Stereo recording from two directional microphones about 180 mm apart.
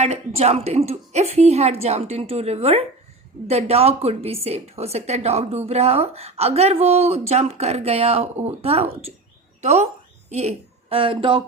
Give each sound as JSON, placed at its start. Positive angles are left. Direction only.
{"t": 0.0, "sound": "a woman's voice", "side_deg": -35}